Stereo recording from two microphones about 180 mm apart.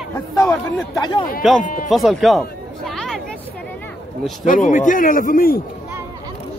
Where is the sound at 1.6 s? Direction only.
50° left (ahead or behind).